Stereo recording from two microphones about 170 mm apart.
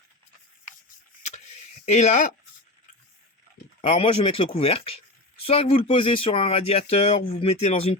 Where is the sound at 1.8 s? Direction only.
40° left (ahead or behind).